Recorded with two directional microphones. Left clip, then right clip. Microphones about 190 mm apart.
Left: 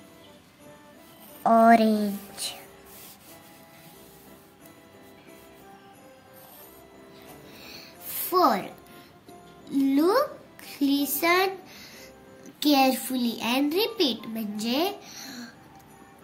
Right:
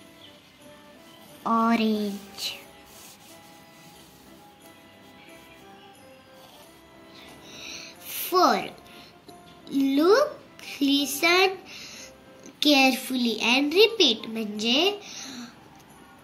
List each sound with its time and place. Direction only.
1.4 s speech: 55° left (ahead or behind)
7.5 s music: 50° left (ahead or behind)
9.7 s music: 45° left (ahead or behind)
10.8 s child singing: 45° left (ahead or behind)
12.5 s a child's voice: 45° left (ahead or behind)
15.0 s a sound: 50° left (ahead or behind)